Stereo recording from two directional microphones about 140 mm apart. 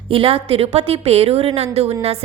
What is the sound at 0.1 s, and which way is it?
A woman's voice, 40° right (ahead or behind).